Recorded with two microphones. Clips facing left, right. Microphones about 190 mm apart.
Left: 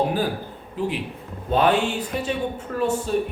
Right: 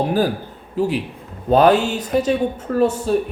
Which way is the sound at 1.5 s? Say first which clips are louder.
Right 6 dB; 40° right (ahead or behind).